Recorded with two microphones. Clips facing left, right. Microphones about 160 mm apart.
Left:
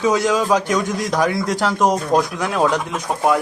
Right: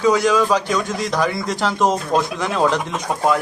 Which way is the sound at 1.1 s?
5° left (ahead or behind).